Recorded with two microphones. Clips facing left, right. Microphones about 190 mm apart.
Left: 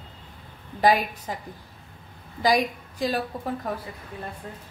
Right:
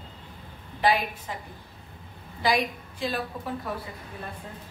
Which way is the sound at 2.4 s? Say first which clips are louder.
Left 3 dB; 40° left (ahead or behind).